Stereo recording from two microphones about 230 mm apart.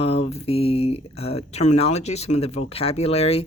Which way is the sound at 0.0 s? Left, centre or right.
Left.